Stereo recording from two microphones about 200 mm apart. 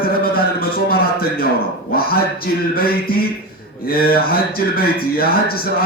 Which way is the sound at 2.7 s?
50° left (ahead or behind).